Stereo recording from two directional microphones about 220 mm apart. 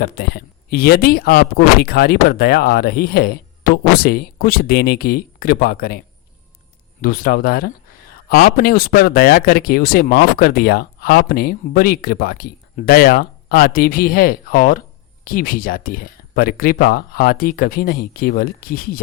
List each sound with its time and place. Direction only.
0.0 s speech: 45° left (ahead or behind)
7.0 s speech: 40° left (ahead or behind)